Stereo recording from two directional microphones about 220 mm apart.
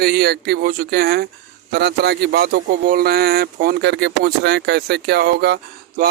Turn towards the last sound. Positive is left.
turn(degrees=-45)  # may be behind; listen again after turning